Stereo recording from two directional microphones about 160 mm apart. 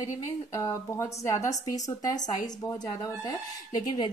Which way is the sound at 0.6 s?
20° left (ahead or behind).